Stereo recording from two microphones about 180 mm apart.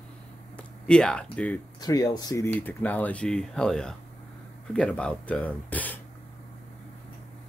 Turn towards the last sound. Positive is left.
turn(degrees=10)  # may be behind; listen again after turning